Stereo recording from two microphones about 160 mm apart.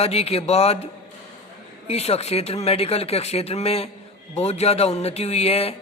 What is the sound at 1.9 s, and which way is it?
A man's voice, 40° left (ahead or behind).